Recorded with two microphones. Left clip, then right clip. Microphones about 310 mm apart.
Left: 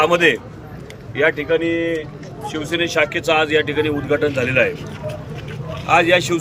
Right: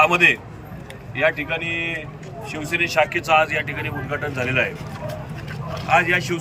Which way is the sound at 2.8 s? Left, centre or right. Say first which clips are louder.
Left 1 dB; centre.